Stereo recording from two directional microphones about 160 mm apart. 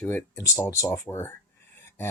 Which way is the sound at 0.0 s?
15° left (ahead or behind).